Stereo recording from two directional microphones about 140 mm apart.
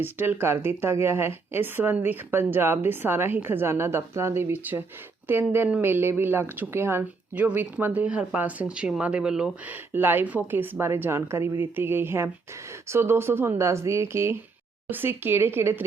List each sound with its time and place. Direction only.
0.0 s a woman's voice: 15° right (ahead or behind)